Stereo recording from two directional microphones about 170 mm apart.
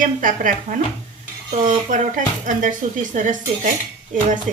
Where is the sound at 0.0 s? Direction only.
50° right (ahead or behind).